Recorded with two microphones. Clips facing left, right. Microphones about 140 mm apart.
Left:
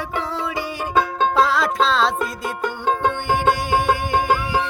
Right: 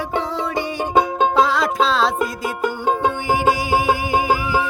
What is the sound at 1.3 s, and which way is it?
Music, centre (ahead or behind).